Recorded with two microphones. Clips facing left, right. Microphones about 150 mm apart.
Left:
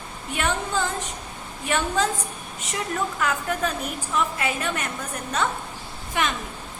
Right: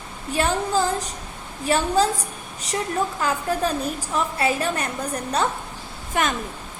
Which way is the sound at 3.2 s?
30° right (ahead or behind).